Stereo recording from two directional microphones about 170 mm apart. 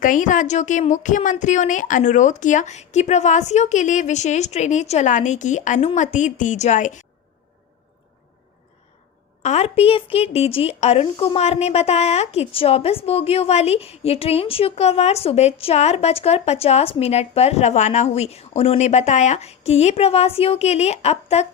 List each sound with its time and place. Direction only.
0.0 s a woman's voice: 50° left (ahead or behind)
9.4 s speech: 40° left (ahead or behind)